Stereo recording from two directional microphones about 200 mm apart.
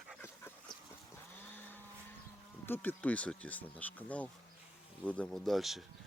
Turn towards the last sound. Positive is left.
turn(degrees=0)  # may be behind; listen again after turning